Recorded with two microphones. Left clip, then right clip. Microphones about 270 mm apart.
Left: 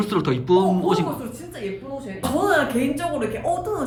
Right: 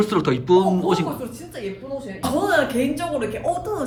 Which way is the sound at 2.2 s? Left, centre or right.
Centre.